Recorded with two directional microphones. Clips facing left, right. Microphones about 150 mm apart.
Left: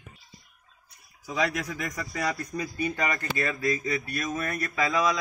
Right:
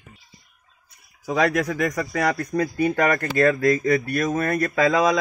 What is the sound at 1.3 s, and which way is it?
Speech, 60° right (ahead or behind).